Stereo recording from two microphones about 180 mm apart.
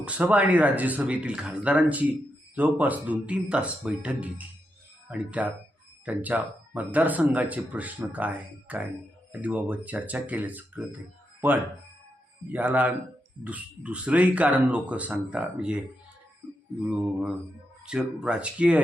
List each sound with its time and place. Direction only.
0.0 s speech: 10° right (ahead or behind)
16.9 s speech: 5° right (ahead or behind)